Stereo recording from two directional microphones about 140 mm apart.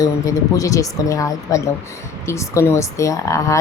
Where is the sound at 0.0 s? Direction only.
25° left (ahead or behind).